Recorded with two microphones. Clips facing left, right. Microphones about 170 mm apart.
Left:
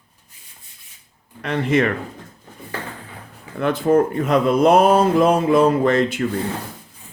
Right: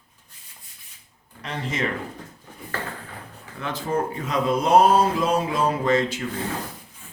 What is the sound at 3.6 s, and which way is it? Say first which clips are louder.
Speech: left 10 dB; 60° left (ahead or behind).